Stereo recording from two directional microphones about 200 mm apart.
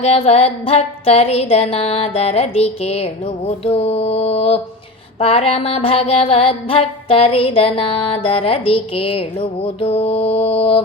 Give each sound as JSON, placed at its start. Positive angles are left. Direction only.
{"t": 0.0, "sound": "music", "side_deg": 30}
{"t": 5.2, "sound": "mantra", "side_deg": 30}